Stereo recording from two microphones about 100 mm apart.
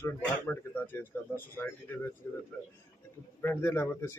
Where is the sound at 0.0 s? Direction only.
20° left (ahead or behind).